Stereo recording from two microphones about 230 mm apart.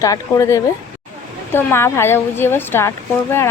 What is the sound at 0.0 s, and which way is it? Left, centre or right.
Speech, centre.